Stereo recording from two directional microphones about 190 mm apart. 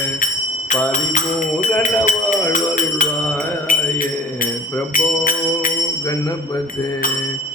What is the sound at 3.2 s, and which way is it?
Mantra, 10° left (ahead or behind).